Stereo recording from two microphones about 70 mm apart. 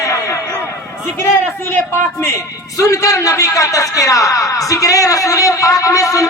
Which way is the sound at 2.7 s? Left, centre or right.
Left.